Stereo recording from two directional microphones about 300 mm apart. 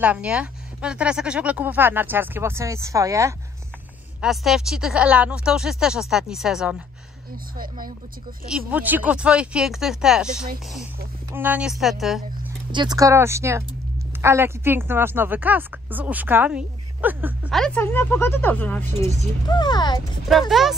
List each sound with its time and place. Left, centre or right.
0.0 s a woman's voice: centre
7.5 s speech: right
8.5 s a woman's voice: centre
12.7 s a woman's voice: centre
20.2 s a woman's voice: centre